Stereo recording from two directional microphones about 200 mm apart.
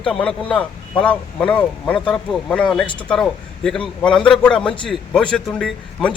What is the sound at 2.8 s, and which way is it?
Speech, 25° left (ahead or behind).